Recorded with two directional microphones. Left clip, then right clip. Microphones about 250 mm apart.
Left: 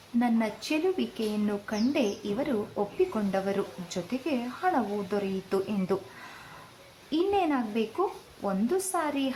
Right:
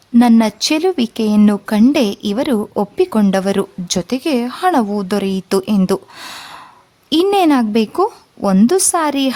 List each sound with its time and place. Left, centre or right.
0.2 s speech: right